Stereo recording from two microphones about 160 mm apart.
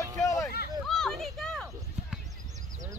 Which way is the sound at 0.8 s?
5° left (ahead or behind).